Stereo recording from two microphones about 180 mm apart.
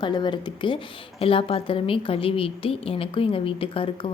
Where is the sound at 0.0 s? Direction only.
25° left (ahead or behind).